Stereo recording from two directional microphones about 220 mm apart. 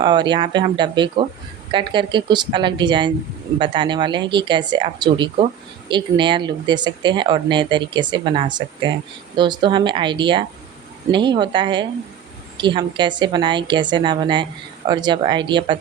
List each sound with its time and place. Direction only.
0.0 s speech: 20° right (ahead or behind)